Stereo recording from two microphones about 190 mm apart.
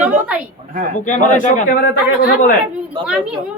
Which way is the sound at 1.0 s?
40° left (ahead or behind).